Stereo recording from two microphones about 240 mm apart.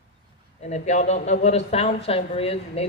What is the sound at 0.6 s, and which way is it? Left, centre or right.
Speech, left.